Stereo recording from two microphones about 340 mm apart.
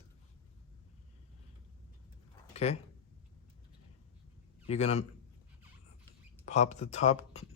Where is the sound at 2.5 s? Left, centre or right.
Centre.